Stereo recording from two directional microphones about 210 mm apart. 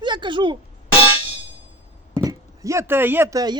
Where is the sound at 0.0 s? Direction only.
20° right (ahead or behind).